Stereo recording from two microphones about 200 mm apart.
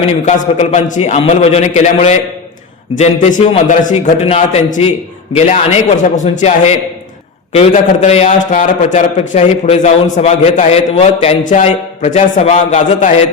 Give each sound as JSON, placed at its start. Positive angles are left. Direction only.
{"t": 0.0, "sound": "a man's voice", "side_deg": 35}